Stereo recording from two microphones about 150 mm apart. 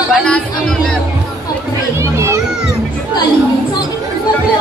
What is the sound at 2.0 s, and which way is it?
Children playing, 20° right (ahead or behind).